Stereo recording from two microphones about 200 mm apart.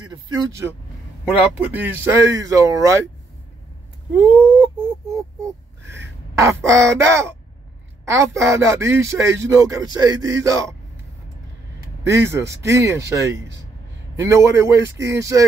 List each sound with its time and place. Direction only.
0.0 s speech: 20° right (ahead or behind)
1.2 s speech: 5° right (ahead or behind)
5.1 s speech: 15° right (ahead or behind)
12.0 s speech: 15° right (ahead or behind)